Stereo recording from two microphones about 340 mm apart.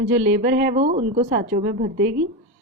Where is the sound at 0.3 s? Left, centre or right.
Right.